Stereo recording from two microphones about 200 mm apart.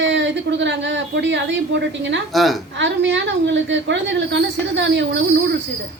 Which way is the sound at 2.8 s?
65° right (ahead or behind).